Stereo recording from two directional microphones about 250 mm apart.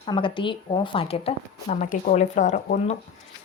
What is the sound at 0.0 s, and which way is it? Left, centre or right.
A woman's voice, centre.